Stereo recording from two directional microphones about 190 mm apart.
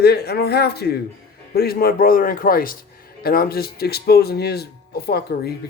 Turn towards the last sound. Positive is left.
turn(degrees=55)  # may be behind; listen again after turning